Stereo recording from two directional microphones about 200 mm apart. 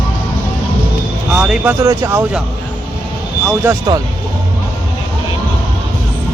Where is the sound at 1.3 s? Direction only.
5° right (ahead or behind).